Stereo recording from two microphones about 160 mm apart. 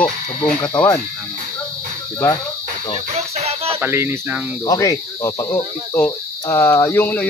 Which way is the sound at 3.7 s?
15° right (ahead or behind).